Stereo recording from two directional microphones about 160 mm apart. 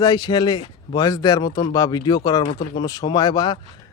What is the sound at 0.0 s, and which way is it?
Speech, 25° left (ahead or behind).